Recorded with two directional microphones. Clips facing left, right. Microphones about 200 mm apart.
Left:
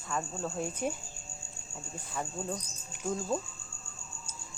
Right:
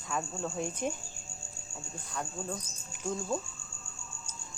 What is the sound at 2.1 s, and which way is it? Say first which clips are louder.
Speech: left 1 dB; 5° left (ahead or behind).